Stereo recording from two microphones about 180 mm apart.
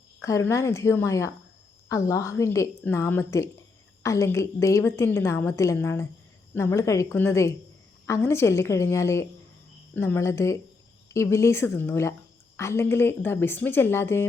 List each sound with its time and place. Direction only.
0.2 s a woman's voice: 15° left (ahead or behind)